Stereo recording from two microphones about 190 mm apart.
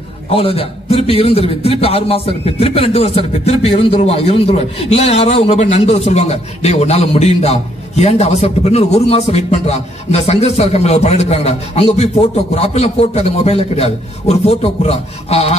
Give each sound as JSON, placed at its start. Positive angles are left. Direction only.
{"t": 0.3, "sound": "a man's voice", "side_deg": 30}